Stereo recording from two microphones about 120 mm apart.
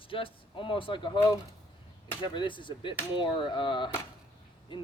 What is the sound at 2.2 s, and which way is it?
Speech, 40° left (ahead or behind).